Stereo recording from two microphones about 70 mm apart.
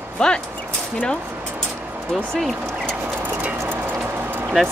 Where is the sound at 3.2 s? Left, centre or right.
Right.